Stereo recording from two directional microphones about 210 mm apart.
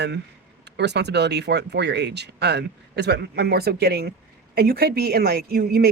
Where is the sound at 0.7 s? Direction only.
55° right (ahead or behind).